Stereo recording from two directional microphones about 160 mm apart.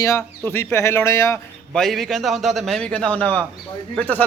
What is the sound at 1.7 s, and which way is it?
A man's voice, centre (ahead or behind).